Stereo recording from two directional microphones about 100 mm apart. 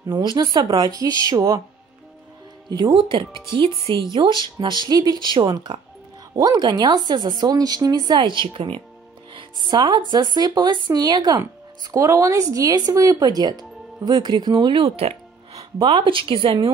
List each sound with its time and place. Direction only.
0.0 s speech: 45° right (ahead or behind)
2.9 s speech: 55° right (ahead or behind)